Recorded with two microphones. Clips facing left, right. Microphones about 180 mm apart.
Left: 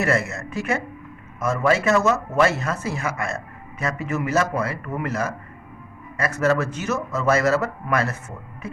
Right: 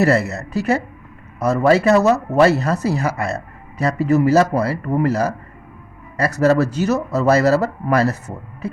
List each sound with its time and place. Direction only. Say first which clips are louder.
0.0 s speech: right 6 dB; 35° right (ahead or behind)